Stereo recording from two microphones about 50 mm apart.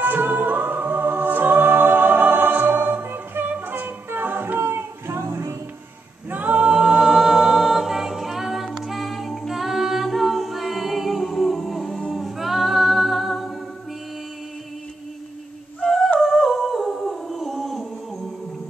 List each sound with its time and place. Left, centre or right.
0.0 s music: right
4.6 s music: right
6.3 s a capella: right
6.7 s a capella: centre
12.1 s music: centre
15.8 s a sound: centre
16.3 s humming: centre